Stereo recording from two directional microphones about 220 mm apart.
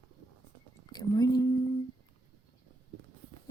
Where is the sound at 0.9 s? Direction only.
15° left (ahead or behind).